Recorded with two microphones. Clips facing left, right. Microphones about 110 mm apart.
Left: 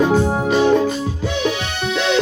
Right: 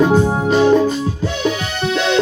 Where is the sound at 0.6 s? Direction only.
10° right (ahead or behind).